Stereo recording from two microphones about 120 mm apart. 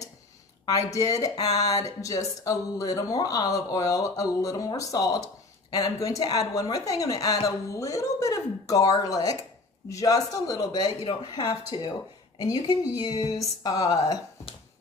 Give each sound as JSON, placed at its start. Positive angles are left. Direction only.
{"t": 0.7, "sound": "a woman's voice", "side_deg": 30}
{"t": 12.4, "sound": "speech", "side_deg": 30}